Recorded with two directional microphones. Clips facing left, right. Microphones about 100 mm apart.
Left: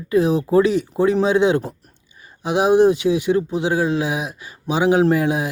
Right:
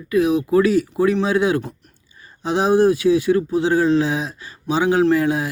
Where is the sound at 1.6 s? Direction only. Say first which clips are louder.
Left 3 dB; 35° left (ahead or behind).